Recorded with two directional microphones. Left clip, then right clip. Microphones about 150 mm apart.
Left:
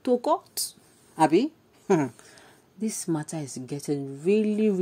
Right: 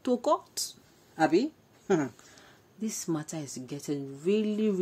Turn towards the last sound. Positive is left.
turn(degrees=30)  # may be behind; listen again after turning